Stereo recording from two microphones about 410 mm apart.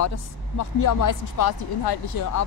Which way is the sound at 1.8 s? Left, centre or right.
Left.